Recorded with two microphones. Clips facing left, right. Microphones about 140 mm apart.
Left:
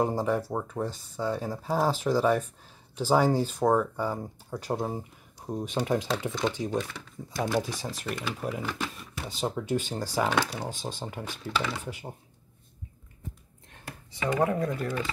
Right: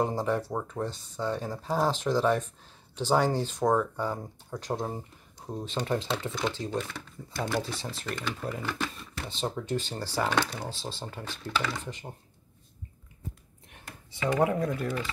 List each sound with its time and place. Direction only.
0.0 s speech: 10° left (ahead or behind)
14.4 s speech: centre (ahead or behind)